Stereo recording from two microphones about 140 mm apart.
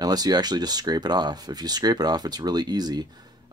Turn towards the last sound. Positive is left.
turn(degrees=-30)  # may be behind; listen again after turning